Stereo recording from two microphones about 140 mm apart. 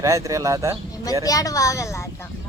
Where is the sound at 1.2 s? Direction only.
25° left (ahead or behind).